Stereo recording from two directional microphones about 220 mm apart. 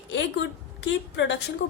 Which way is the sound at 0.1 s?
55° left (ahead or behind).